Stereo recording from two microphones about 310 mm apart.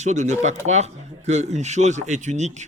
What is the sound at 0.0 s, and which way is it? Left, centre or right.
Speech, right.